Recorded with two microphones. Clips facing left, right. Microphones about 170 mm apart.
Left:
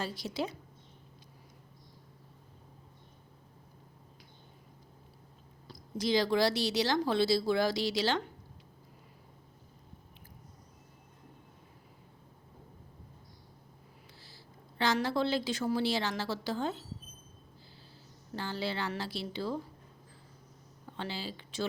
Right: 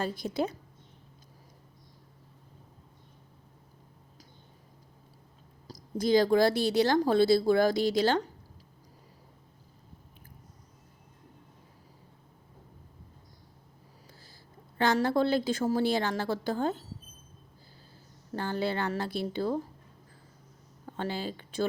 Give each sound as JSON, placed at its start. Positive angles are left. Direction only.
{"t": 0.0, "sound": "a woman's voice", "side_deg": -55}
{"t": 5.6, "sound": "a woman's voice", "side_deg": -50}
{"t": 14.8, "sound": "a woman's voice", "side_deg": -50}
{"t": 18.3, "sound": "a woman's voice", "side_deg": -50}
{"t": 20.8, "sound": "speech", "side_deg": -50}